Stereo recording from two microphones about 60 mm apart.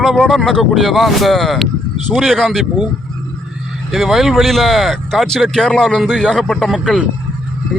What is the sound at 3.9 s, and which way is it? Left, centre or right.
A man's voice, centre.